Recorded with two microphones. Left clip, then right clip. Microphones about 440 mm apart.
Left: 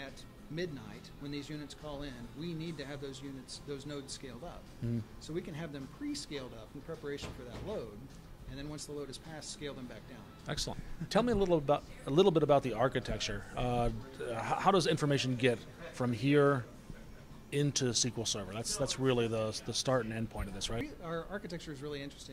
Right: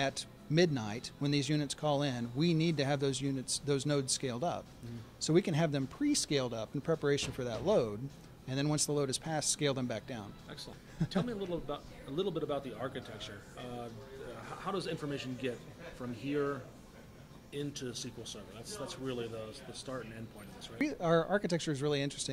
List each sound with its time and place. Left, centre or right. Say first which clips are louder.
0.0 s speech: right 12 dB; right
10.4 s speech: left 8 dB; left
17.5 s speech: left 7 dB; left
20.8 s speech: right 10 dB; right